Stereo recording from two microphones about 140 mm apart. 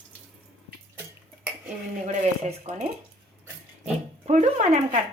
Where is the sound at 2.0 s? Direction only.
55° right (ahead or behind).